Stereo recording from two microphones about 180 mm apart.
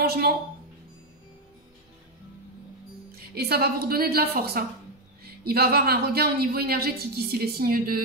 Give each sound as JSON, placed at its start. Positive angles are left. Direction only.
{"t": 0.0, "sound": "speech", "side_deg": -60}
{"t": 3.1, "sound": "speech", "side_deg": -60}